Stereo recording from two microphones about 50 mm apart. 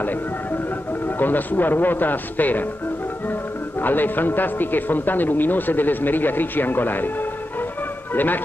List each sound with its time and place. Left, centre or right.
1.2 s a man's voice: left
3.8 s a man's voice: left
8.1 s a man's voice: left